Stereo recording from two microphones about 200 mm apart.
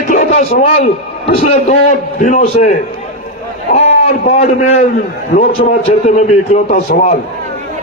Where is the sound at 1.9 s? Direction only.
35° left (ahead or behind).